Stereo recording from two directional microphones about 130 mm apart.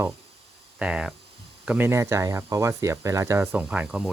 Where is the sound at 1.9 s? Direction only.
20° right (ahead or behind).